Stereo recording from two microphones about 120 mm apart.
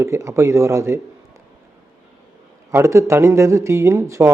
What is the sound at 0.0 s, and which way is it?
Speech, 25° right (ahead or behind).